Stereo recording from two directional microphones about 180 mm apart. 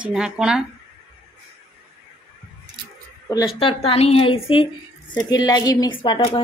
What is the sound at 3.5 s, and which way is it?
A woman's voice, 30° left (ahead or behind).